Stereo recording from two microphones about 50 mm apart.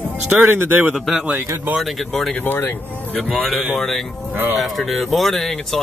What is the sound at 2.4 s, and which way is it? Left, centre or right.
Speech, left.